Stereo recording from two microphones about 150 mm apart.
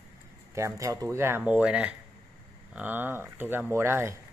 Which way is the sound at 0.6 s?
20° right (ahead or behind).